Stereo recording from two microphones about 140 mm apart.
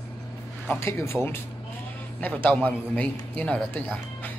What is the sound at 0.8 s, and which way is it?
A man's voice, 20° left (ahead or behind).